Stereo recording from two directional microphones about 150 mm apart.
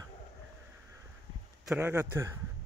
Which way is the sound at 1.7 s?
10° right (ahead or behind).